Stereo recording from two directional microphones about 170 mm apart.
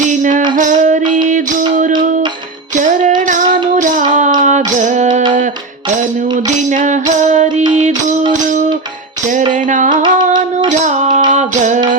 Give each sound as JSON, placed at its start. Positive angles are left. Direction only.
{"t": 0.1, "sound": "music", "side_deg": -50}
{"t": 2.7, "sound": "music", "side_deg": -50}
{"t": 6.7, "sound": "music", "side_deg": -45}
{"t": 9.5, "sound": "music", "side_deg": -50}
{"t": 9.9, "sound": "music", "side_deg": -25}
{"t": 10.7, "sound": "music", "side_deg": -45}
{"t": 11.3, "sound": "a sound", "side_deg": -45}